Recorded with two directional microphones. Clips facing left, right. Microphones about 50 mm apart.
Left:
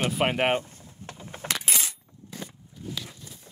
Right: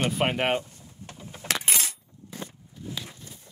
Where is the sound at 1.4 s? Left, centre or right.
Right.